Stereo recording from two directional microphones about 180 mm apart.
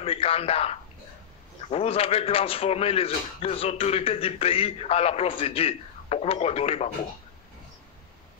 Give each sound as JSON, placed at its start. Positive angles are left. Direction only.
{"t": 0.0, "sound": "a man's voice", "side_deg": 35}